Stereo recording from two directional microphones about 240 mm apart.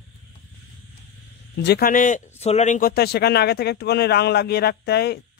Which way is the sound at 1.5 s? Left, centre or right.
Left.